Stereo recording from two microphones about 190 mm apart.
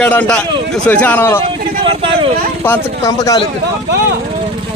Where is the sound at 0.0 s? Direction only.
10° left (ahead or behind).